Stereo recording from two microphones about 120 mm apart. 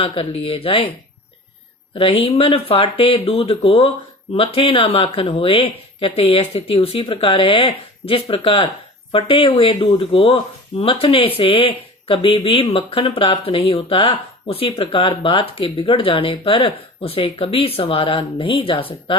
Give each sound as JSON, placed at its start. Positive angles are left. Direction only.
{"t": 0.0, "sound": "speech", "side_deg": 50}
{"t": 2.0, "sound": "speech", "side_deg": 50}